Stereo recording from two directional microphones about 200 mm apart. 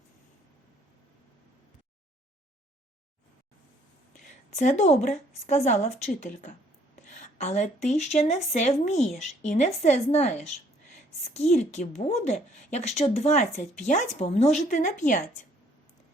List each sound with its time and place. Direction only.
4.5 s a woman's voice: 35° left (ahead or behind)